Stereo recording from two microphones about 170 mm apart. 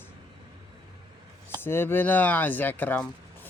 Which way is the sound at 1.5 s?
15° left (ahead or behind).